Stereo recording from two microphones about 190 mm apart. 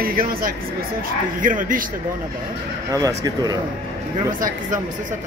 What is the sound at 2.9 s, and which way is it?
Speech, 20° right (ahead or behind).